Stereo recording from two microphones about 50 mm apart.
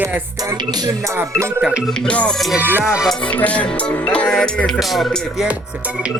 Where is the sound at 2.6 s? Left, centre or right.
Right.